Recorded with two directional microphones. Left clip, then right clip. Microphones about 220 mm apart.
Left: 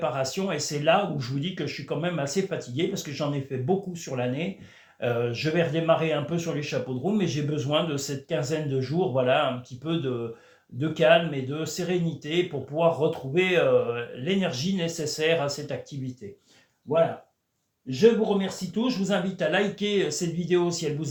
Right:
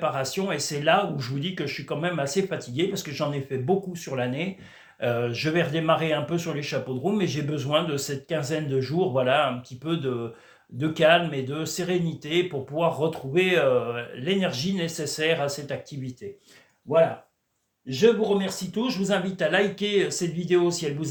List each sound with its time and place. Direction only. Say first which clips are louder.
0.0 s speech: right 1 dB; 15° right (ahead or behind)
18.4 s speech: even; 20° right (ahead or behind)